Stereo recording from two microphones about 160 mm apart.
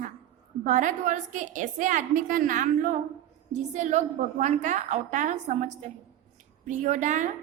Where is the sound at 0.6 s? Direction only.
50° right (ahead or behind).